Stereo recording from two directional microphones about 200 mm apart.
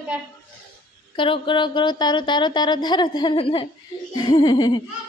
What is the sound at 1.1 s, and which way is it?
Speech, 25° left (ahead or behind).